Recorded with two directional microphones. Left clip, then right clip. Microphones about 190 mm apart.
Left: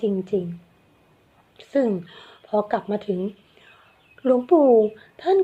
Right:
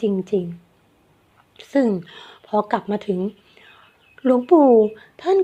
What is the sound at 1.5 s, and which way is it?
A woman's voice, 25° right (ahead or behind).